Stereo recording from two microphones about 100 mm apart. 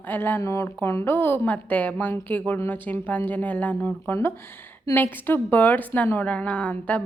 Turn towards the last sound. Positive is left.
turn(degrees=15)  # may be behind; listen again after turning